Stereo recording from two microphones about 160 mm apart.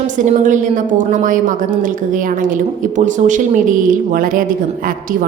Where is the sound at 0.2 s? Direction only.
50° right (ahead or behind).